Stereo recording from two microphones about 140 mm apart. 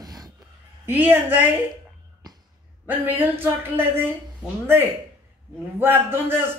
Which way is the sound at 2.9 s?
15° right (ahead or behind).